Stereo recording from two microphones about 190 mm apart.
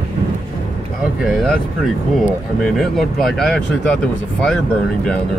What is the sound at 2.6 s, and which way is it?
Speech, centre (ahead or behind).